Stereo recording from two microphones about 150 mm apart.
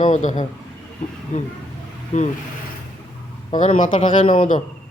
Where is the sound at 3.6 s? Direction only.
55° left (ahead or behind).